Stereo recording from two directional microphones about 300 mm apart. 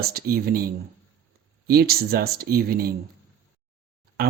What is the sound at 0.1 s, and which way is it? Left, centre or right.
Speech, right.